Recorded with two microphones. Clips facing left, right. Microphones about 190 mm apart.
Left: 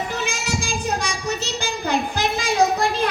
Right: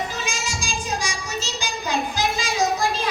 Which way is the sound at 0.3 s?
60° left (ahead or behind).